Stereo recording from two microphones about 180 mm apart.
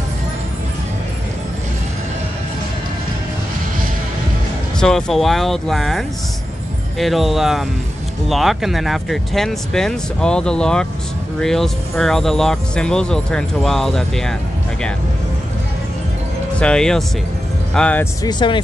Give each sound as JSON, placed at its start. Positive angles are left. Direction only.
{"t": 4.7, "sound": "speech", "side_deg": 5}
{"t": 16.5, "sound": "speech", "side_deg": 5}
{"t": 18.2, "sound": "speech", "side_deg": 25}